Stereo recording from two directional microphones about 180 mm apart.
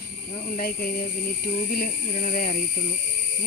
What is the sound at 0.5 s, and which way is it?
Speech, 50° left (ahead or behind).